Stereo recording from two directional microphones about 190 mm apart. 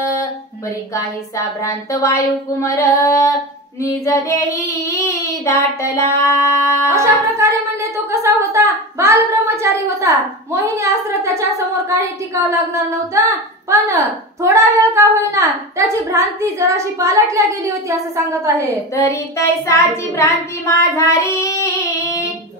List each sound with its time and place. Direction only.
0.0 s a sound: 15° left (ahead or behind)
1.6 s child singing: 15° left (ahead or behind)
6.9 s singing: 15° right (ahead or behind)
8.1 s a woman's voice: 15° right (ahead or behind)
18.9 s child singing: 15° left (ahead or behind)